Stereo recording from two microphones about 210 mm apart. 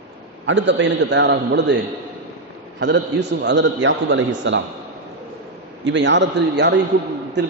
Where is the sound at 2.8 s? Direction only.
55° right (ahead or behind).